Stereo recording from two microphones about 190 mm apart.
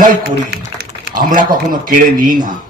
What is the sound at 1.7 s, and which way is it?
Speech, 45° right (ahead or behind).